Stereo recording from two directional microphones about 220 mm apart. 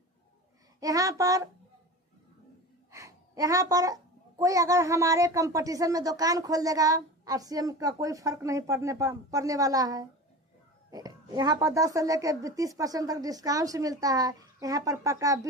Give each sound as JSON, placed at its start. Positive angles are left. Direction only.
{"t": 0.8, "sound": "a woman's voice", "side_deg": -15}
{"t": 2.9, "sound": "a woman's voice", "side_deg": -15}